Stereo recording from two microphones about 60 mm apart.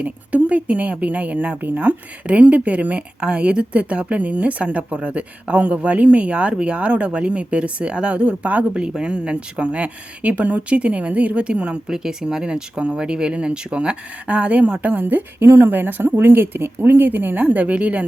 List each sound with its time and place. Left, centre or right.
0.0 s speech: right